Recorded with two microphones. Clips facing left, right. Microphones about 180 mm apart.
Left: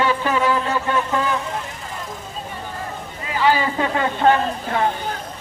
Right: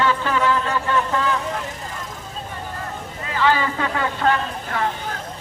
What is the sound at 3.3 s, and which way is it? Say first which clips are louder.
Speech: left 1 dB; 15° left (ahead or behind).